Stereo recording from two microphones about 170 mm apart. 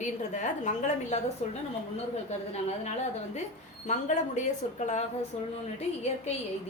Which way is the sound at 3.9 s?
45° left (ahead or behind).